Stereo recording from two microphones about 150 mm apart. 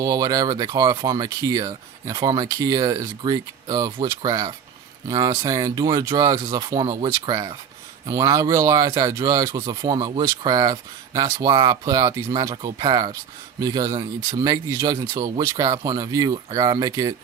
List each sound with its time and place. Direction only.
0.0 s speech: 25° right (ahead or behind)